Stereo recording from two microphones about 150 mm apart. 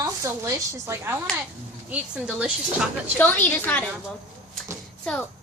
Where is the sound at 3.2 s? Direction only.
10° left (ahead or behind).